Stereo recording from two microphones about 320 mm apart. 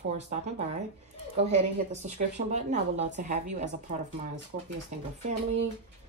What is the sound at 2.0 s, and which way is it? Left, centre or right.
Speech, right.